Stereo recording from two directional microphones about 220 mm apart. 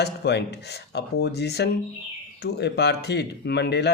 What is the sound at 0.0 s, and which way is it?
Speech, 50° left (ahead or behind).